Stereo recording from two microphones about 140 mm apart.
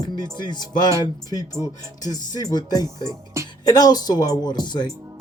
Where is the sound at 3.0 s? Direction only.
20° right (ahead or behind).